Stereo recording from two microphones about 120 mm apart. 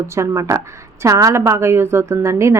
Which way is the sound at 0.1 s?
25° right (ahead or behind).